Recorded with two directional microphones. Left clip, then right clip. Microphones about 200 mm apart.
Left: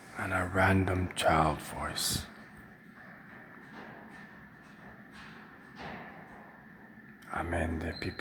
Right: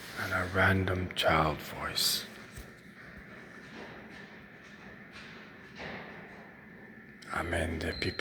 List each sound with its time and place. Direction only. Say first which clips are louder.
0.2 s speech: even; 15° left (ahead or behind)
7.3 s speech: right 1 dB; 15° left (ahead or behind)